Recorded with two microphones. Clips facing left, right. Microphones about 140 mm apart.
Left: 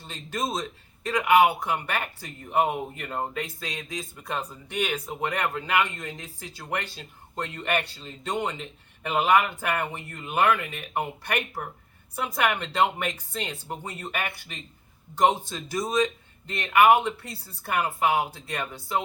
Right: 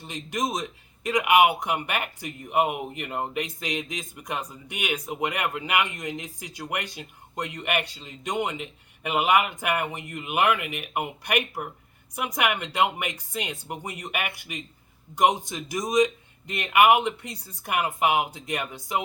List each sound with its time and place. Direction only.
0.1 s speech: 15° right (ahead or behind)